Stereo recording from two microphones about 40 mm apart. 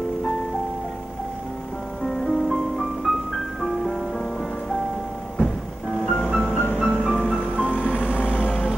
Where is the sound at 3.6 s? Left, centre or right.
Centre.